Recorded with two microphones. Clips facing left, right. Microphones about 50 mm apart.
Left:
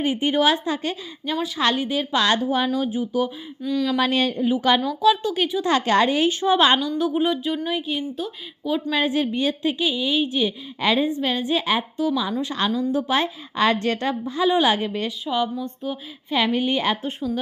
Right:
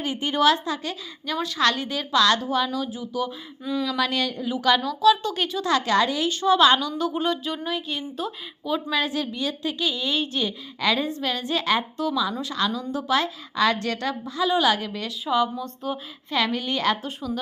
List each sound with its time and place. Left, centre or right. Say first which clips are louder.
0.0 s a woman's voice: left 2 dB; left
1.3 s a woman's voice: left 1 dB; centre
3.6 s speech: left 3 dB; centre
3.9 s a woman's voice: left 4 dB; left
4.8 s speech: even; centre
5.6 s a woman's voice: left 2 dB; left
7.0 s speech: left 3 dB; centre
8.9 s a woman's voice: left 4 dB; left
9.7 s speech: left 3 dB; centre
10.8 s a woman's voice: left 3 dB; left
12.4 s a woman's voice: left 3 dB; left
15.8 s speech: right 1 dB; centre
16.3 s a woman's voice: left 4 dB; centre